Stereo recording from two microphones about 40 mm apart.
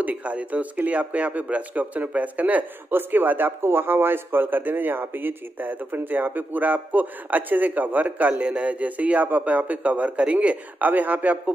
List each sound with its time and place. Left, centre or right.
0.0 s a man's voice: right
2.9 s a man's voice: right
10.9 s speech: right